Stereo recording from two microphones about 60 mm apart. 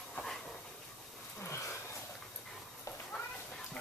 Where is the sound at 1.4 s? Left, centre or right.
Left.